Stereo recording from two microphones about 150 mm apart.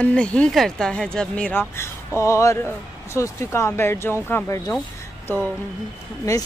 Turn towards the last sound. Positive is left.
turn(degrees=20)  # may be behind; listen again after turning